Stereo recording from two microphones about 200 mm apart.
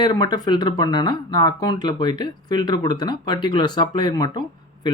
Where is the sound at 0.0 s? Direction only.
20° left (ahead or behind).